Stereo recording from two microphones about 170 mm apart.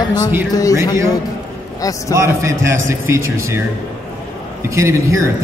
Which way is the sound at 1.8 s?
20° left (ahead or behind).